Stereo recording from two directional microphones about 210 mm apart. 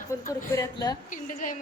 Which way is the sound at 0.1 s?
15° left (ahead or behind).